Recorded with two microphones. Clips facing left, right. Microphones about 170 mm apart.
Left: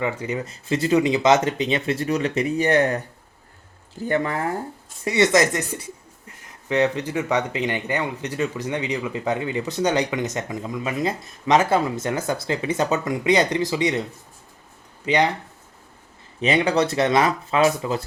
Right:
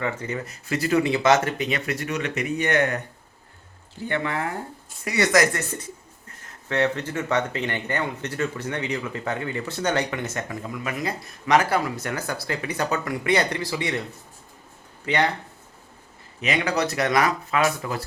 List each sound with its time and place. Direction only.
0.0 s speech: 15° left (ahead or behind); by 3.0 s 30° left (ahead or behind)
4.0 s speech: 40° left (ahead or behind)
5.0 s speech: 25° left (ahead or behind)
15.0 s speech: 15° left (ahead or behind)
16.4 s speech: 30° left (ahead or behind)